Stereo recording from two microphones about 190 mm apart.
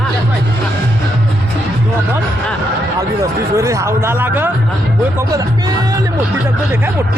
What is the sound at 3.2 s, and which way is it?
Speech, 15° right (ahead or behind).